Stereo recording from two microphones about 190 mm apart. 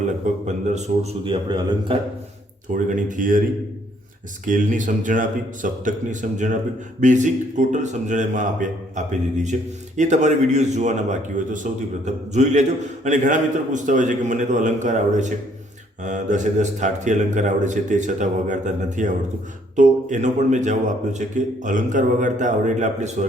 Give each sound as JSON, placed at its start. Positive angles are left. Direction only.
{"t": 0.4, "sound": "a man's voice", "side_deg": -40}
{"t": 2.7, "sound": "speech", "side_deg": -40}
{"t": 4.4, "sound": "a man's voice", "side_deg": -45}